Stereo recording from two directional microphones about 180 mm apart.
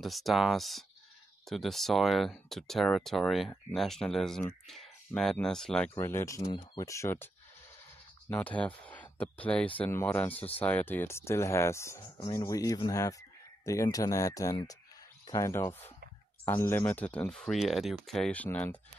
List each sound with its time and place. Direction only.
0.0 s speech: centre (ahead or behind)
8.3 s speech: 10° left (ahead or behind)